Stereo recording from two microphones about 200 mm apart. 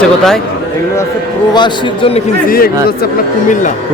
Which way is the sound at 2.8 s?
45° left (ahead or behind).